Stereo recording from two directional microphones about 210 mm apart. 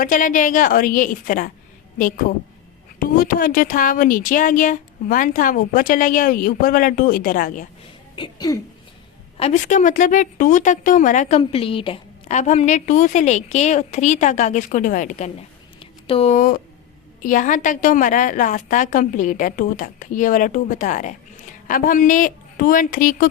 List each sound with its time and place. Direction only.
0.0 s a woman's voice: 40° left (ahead or behind)
8.1 s speech: 20° left (ahead or behind)
9.4 s a woman's voice: 35° left (ahead or behind)
15.8 s a sound: 25° left (ahead or behind)
17.2 s a woman's voice: 40° left (ahead or behind)